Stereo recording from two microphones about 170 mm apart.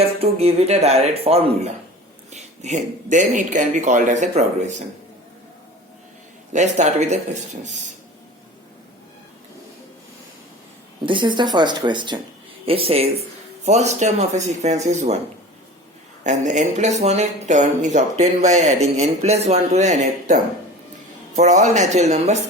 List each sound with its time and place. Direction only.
0.0 s speech: 35° right (ahead or behind)
6.5 s speech: 45° right (ahead or behind)
11.0 s speech: 30° right (ahead or behind)
16.2 s speech: 45° right (ahead or behind)